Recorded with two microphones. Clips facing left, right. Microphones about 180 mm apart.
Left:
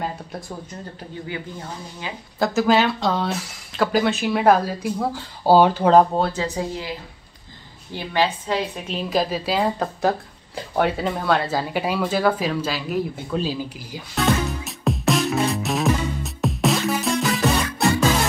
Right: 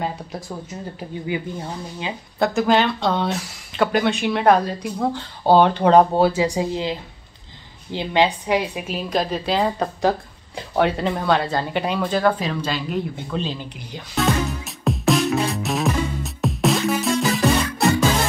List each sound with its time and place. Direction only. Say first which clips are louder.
0.0 s speech: right 2 dB; centre (ahead or behind)
2.3 s a woman's voice: even; centre (ahead or behind)